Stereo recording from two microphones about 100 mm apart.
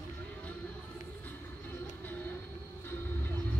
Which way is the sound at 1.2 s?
20° left (ahead or behind).